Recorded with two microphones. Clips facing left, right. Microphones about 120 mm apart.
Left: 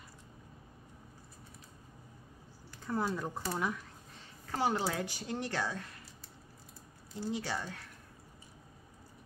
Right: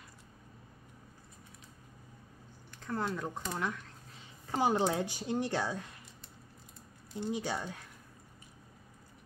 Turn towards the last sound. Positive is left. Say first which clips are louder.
# right 1 dB
turn(degrees=-15)  # may be behind; listen again after turning